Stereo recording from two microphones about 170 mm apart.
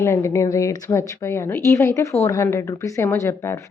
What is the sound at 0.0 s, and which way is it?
A woman's voice, 15° left (ahead or behind).